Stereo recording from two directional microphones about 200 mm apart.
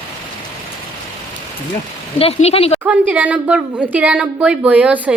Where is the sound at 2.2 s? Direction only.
30° left (ahead or behind).